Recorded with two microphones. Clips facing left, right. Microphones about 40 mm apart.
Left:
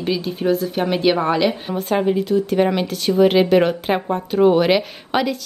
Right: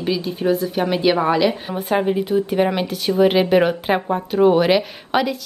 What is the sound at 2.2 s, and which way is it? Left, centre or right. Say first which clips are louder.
Speech: left 1 dB; right.